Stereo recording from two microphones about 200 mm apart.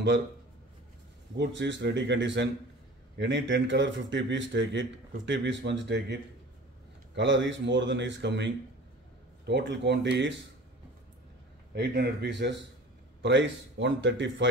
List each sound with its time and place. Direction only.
1.3 s speech: 65° right (ahead or behind)
7.2 s speech: 65° right (ahead or behind)
9.5 s speech: 60° right (ahead or behind)
11.7 s speech: 55° right (ahead or behind)